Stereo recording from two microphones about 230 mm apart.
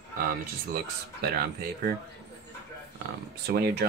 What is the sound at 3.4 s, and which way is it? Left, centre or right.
Speech, right.